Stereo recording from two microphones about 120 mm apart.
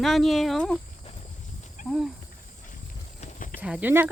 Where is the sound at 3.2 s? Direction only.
90° left.